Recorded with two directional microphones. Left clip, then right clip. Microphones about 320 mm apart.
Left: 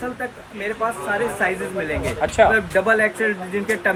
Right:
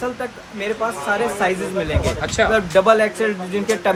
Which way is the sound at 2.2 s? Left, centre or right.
Centre.